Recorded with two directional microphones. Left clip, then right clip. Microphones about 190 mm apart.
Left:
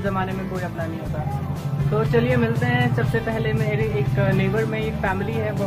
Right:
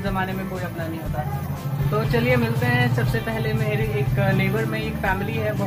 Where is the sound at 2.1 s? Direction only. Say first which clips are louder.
Even; 15° left (ahead or behind).